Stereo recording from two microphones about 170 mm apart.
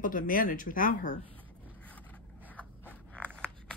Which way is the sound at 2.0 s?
10° left (ahead or behind).